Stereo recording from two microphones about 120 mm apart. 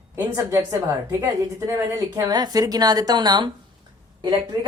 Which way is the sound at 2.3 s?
35° right (ahead or behind).